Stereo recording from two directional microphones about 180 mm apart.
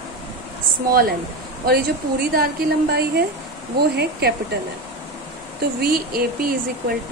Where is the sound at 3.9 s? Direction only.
65° right (ahead or behind).